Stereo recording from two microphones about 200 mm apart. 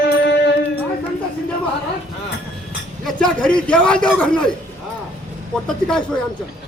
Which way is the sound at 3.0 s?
5° left (ahead or behind).